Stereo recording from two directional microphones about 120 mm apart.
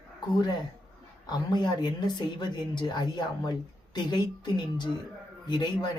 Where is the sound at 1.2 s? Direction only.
35° left (ahead or behind).